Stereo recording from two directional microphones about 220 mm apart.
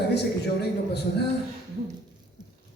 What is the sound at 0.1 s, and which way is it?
Speech, 50° left (ahead or behind).